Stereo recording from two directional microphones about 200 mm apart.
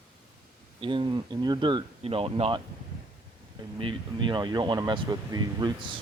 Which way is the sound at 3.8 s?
25° right (ahead or behind).